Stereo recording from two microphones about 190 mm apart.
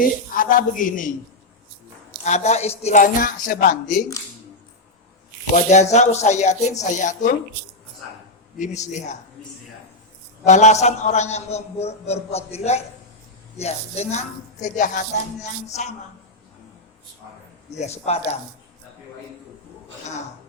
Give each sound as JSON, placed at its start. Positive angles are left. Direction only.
{"t": 0.0, "sound": "speech", "side_deg": 45}
{"t": 2.2, "sound": "speech", "side_deg": 35}
{"t": 5.5, "sound": "a man's voice", "side_deg": 35}
{"t": 8.5, "sound": "a man's voice", "side_deg": 40}
{"t": 10.4, "sound": "a man's voice", "side_deg": 40}
{"t": 17.7, "sound": "a man's voice", "side_deg": 35}